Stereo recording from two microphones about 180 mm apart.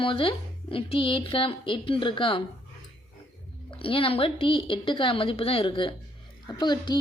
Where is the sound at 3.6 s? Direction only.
30° left (ahead or behind).